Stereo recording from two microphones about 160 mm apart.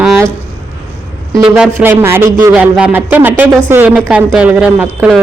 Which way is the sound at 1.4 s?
5° right (ahead or behind).